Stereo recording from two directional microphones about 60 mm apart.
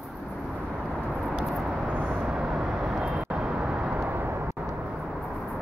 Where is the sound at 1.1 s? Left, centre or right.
Centre.